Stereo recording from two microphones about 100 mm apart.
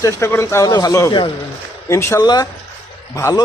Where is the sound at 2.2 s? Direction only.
40° left (ahead or behind).